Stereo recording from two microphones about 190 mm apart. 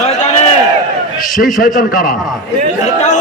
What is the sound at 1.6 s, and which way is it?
Speech, 45° left (ahead or behind).